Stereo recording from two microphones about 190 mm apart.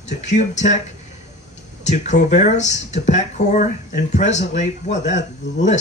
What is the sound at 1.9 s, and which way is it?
Speech, 40° left (ahead or behind).